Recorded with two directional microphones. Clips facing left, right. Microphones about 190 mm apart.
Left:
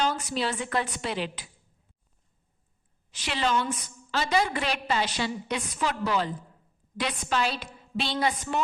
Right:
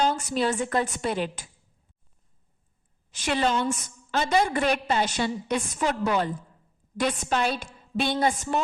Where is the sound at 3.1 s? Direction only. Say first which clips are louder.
Right 3 dB; 50° right (ahead or behind).